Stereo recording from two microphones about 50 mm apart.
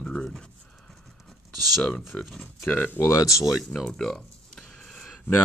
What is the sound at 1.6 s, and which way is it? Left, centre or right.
Speech, centre.